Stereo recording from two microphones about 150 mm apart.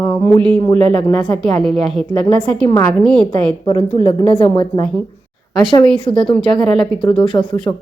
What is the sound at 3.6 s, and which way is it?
Speech, 25° left (ahead or behind).